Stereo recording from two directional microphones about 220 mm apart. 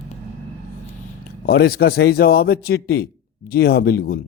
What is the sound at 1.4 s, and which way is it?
A man's voice, 45° left (ahead or behind).